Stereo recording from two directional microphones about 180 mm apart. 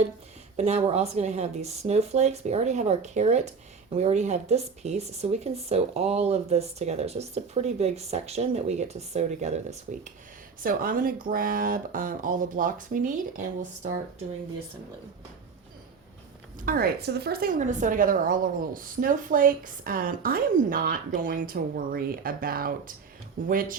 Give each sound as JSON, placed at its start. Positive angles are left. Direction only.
{"t": 0.5, "sound": "speech", "side_deg": -35}
{"t": 10.6, "sound": "a woman's voice", "side_deg": -50}
{"t": 16.6, "sound": "a woman's voice", "side_deg": -55}